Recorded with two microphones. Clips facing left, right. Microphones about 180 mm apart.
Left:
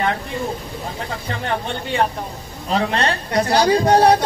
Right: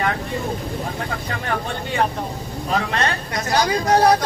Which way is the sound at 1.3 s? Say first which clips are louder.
Left 3 dB; 25° left (ahead or behind).